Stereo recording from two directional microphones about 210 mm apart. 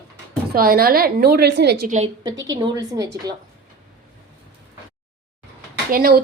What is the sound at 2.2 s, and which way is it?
Speech, 15° right (ahead or behind).